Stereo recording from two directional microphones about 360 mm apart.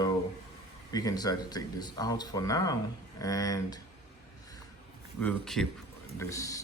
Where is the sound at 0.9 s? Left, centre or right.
Centre.